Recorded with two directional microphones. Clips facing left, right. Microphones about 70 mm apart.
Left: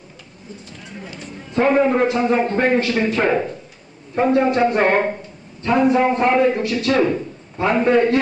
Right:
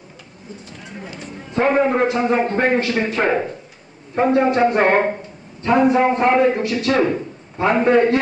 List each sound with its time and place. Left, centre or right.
0.7 s a man's voice: right